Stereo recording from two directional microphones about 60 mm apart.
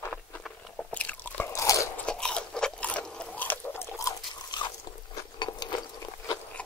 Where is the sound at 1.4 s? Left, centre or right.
Left.